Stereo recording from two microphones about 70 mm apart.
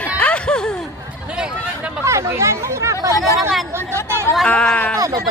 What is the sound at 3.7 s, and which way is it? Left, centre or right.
Chatter, right.